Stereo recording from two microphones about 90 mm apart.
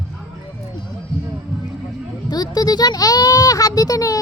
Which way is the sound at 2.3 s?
45° left (ahead or behind).